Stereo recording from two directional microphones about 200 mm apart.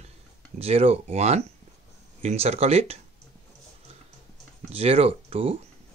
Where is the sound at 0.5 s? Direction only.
30° right (ahead or behind).